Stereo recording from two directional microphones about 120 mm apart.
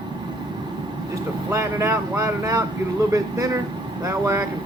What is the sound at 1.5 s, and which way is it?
Speech, 20° right (ahead or behind).